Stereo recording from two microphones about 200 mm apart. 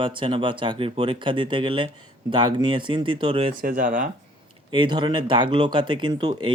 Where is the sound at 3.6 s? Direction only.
45° right (ahead or behind).